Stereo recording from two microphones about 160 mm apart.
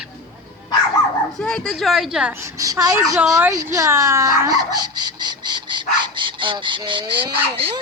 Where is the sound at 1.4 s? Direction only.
5° left (ahead or behind).